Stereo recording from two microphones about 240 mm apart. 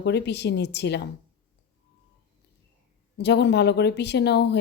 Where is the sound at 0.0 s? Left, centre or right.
Left.